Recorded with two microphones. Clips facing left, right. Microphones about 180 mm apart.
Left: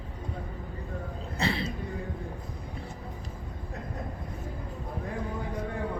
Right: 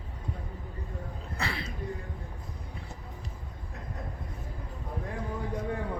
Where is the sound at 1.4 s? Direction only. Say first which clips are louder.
Left 6 dB; 25° left (ahead or behind).